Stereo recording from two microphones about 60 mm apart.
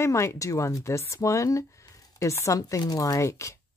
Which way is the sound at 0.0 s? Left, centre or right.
Left.